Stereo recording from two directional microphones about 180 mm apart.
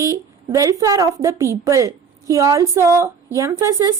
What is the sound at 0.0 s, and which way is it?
A woman's voice, 20° right (ahead or behind).